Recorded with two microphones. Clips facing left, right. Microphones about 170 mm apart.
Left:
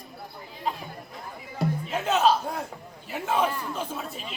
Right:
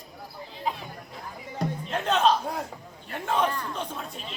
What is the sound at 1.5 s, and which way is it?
Music, 5° left (ahead or behind).